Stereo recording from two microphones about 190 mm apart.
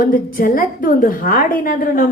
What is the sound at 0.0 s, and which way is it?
A woman's voice, 45° left (ahead or behind).